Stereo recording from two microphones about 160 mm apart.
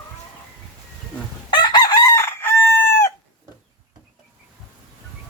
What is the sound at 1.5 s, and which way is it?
Chicken, 25° left (ahead or behind).